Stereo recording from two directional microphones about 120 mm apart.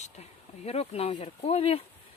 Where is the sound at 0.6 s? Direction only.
60° left (ahead or behind).